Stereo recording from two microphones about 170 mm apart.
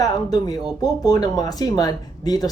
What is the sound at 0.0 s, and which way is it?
Speech, 25° left (ahead or behind).